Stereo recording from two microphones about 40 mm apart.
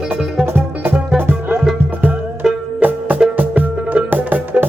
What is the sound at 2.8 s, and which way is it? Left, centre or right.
Music, right.